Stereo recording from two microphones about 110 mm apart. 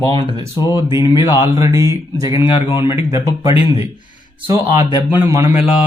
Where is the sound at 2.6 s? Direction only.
50° left (ahead or behind).